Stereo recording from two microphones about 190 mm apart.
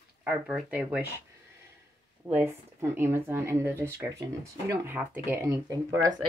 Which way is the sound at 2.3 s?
15° right (ahead or behind).